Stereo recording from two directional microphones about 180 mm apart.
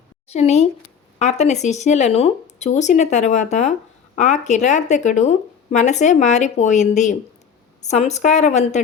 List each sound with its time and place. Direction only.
0.3 s speech: 35° left (ahead or behind)